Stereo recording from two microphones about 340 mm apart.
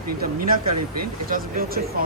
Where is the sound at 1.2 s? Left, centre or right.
Right.